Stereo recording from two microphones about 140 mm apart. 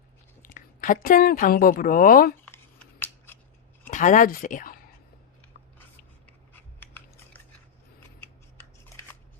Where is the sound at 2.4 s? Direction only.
15° left (ahead or behind).